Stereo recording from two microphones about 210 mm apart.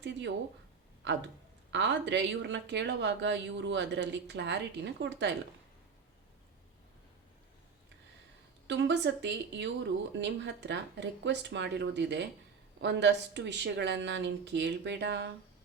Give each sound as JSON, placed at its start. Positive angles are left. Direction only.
{"t": 0.0, "sound": "a sound", "side_deg": -55}
{"t": 1.7, "sound": "speech", "side_deg": -55}
{"t": 8.6, "sound": "speech", "side_deg": -55}